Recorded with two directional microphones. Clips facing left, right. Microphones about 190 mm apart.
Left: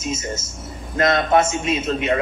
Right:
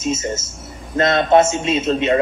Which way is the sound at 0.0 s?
25° right (ahead or behind).